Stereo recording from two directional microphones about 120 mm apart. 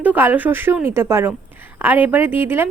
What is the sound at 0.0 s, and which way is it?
A woman's voice, 15° right (ahead or behind).